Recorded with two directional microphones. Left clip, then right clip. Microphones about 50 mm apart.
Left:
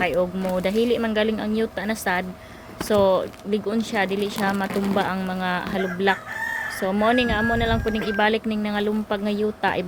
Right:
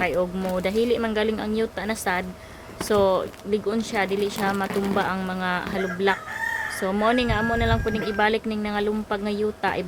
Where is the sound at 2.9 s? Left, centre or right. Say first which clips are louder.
Left 2 dB; left.